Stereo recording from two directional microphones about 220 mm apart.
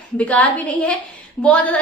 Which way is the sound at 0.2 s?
5° left (ahead or behind).